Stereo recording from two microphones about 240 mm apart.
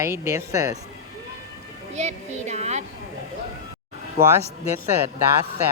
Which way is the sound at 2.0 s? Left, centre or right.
Right.